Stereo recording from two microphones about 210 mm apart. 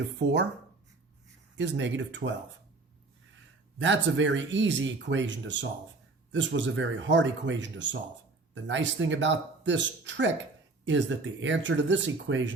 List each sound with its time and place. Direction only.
1.5 s speech: 60° right (ahead or behind)
3.8 s speech: 60° right (ahead or behind)